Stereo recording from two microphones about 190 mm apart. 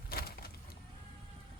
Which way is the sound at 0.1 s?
55° left (ahead or behind).